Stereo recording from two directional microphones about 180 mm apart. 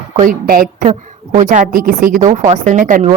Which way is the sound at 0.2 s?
50° right (ahead or behind).